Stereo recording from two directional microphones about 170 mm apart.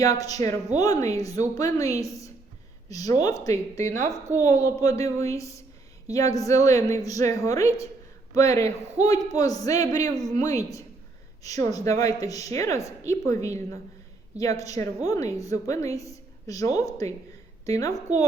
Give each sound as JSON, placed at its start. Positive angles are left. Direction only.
{"t": 0.0, "sound": "a woman's voice", "side_deg": 20}